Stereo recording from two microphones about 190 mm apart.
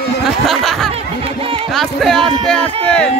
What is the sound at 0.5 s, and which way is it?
Snicker, centre (ahead or behind).